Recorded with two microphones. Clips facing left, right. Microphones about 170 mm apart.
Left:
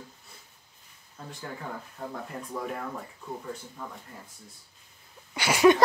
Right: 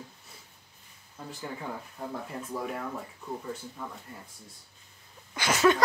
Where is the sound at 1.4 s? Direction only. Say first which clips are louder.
Right 1 dB; 5° right (ahead or behind).